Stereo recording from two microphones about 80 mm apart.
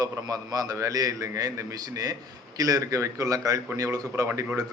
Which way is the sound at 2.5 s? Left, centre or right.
Right.